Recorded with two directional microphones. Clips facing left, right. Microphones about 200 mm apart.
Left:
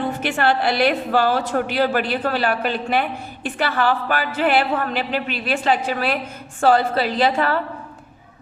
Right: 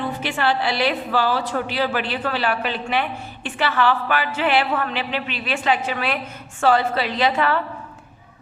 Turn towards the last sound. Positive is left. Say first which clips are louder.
# left 1 dB
turn(degrees=35)  # may be behind; listen again after turning